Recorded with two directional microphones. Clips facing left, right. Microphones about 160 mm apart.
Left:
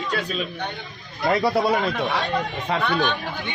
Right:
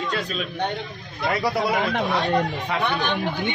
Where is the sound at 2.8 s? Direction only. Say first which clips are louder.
Left 1 dB; 20° right (ahead or behind).